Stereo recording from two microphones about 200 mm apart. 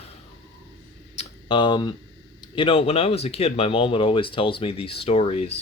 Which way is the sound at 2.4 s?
25° left (ahead or behind).